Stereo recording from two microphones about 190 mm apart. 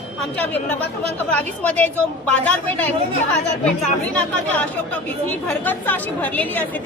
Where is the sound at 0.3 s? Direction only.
10° left (ahead or behind).